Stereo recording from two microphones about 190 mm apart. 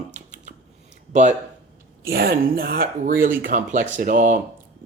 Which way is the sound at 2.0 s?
50° right (ahead or behind).